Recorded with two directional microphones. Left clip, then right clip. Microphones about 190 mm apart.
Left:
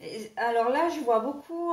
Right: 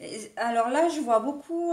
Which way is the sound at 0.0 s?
50° right (ahead or behind).